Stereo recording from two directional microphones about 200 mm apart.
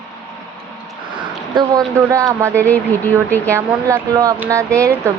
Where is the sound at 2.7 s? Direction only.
10° left (ahead or behind).